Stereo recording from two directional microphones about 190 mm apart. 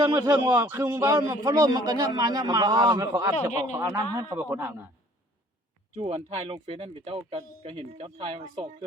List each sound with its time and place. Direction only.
0.0 s a man's voice: 15° right (ahead or behind)
3.5 s speech: 35° left (ahead or behind)
3.8 s a man's voice: 15° right (ahead or behind)
6.0 s speech: 30° right (ahead or behind)